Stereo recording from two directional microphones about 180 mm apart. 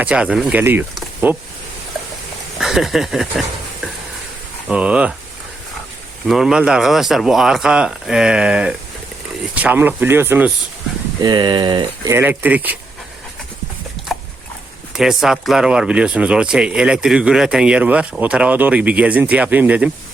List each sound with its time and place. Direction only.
0.0 s speech: 5° right (ahead or behind)
0.9 s a sound: 10° right (ahead or behind)
2.6 s speech: centre (ahead or behind)
4.7 s speech: 5° right (ahead or behind)
6.2 s speech: 5° right (ahead or behind)
11.2 s speech: 25° right (ahead or behind)
12.1 s speech: 10° right (ahead or behind)
14.9 s speech: centre (ahead or behind)